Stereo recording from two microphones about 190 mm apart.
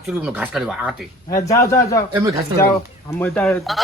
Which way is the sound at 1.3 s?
15° left (ahead or behind).